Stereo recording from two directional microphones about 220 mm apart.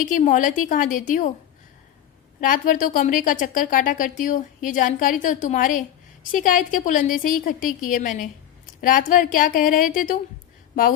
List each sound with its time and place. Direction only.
0.0 s a woman's voice: 35° left (ahead or behind)
2.4 s a woman's voice: 40° left (ahead or behind)